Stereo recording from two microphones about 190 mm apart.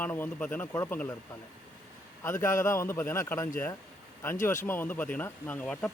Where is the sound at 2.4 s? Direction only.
15° left (ahead or behind).